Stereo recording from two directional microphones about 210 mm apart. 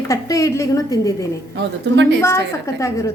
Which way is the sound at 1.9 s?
55° right (ahead or behind).